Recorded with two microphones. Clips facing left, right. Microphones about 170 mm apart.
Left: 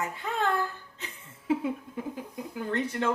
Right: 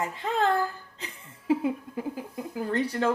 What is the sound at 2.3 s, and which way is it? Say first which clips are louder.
Speech: right 2 dB; 35° right (ahead or behind).